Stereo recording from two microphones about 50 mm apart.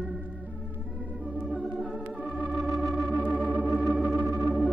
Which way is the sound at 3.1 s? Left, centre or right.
Left.